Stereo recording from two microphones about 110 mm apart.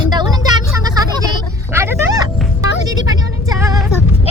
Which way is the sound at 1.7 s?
20° right (ahead or behind).